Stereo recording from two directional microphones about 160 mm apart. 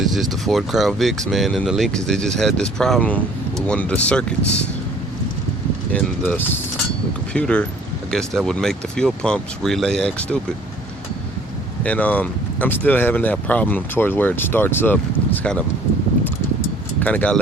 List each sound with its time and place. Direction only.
0.0 s speech: centre (ahead or behind)
5.9 s speech: 10° left (ahead or behind)
11.8 s speech: 10° left (ahead or behind)
17.0 s speech: 10° left (ahead or behind)